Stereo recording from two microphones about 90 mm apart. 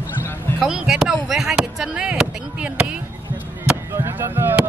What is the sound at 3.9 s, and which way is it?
Fireworks, 30° right (ahead or behind).